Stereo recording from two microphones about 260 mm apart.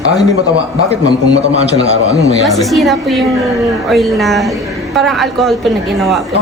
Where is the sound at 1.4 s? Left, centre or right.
Right.